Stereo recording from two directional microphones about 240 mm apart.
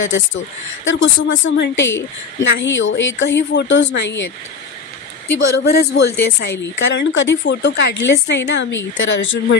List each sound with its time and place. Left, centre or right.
0.8 s a woman's voice: left
5.6 s a woman's voice: left